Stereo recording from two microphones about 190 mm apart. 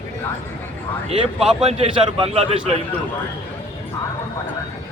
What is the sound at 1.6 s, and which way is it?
Speech, 30° right (ahead or behind).